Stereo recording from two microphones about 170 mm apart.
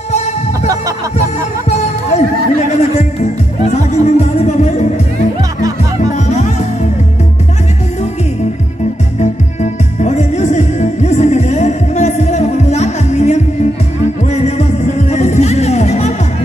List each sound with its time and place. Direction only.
1.7 s music: 45° left (ahead or behind)
2.7 s speech: 40° left (ahead or behind)
6.1 s music: 45° left (ahead or behind)
9.2 s music: 45° left (ahead or behind)